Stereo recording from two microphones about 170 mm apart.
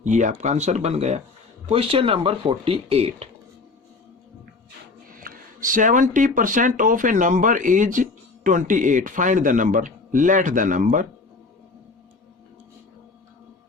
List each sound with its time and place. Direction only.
0.0 s speech: 45° right (ahead or behind)
5.0 s a man's voice: 55° right (ahead or behind)